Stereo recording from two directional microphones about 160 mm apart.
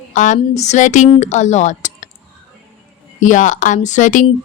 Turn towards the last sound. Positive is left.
turn(degrees=50)  # may be behind; listen again after turning